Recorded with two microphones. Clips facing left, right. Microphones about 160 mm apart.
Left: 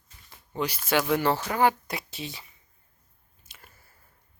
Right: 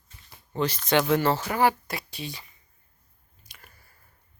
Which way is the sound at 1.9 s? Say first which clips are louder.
Even; 20° left (ahead or behind).